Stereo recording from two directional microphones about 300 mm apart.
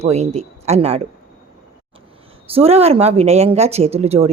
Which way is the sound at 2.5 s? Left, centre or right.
Centre.